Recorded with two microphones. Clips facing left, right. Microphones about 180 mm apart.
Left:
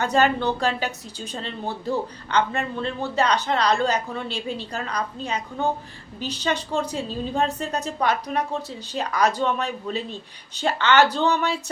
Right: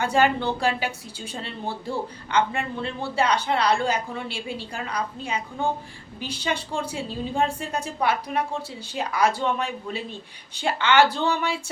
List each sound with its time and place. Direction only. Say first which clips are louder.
0.0 s a man's voice: left 1 dB; 10° right (ahead or behind)
0.9 s a woman's voice: left 1 dB; 40° left (ahead or behind)
1.4 s a man's voice: left 1 dB; 10° right (ahead or behind)